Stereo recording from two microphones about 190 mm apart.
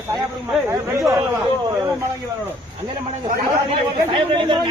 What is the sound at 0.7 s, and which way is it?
Speech, 15° right (ahead or behind).